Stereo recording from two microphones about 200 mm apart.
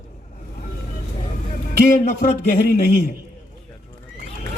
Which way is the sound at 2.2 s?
45° left (ahead or behind).